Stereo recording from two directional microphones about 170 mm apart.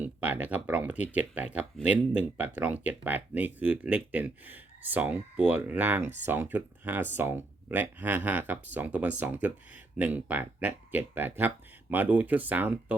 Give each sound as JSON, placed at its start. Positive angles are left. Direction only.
{"t": 0.0, "sound": "speech", "side_deg": -10}
{"t": 6.0, "sound": "speech", "side_deg": -40}
{"t": 6.2, "sound": "speech", "side_deg": -10}